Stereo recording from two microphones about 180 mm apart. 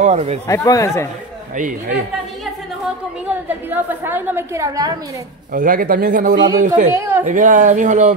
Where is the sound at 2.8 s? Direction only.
10° right (ahead or behind).